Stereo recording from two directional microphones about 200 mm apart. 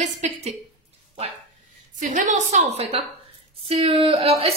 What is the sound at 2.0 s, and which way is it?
Speech, 40° right (ahead or behind).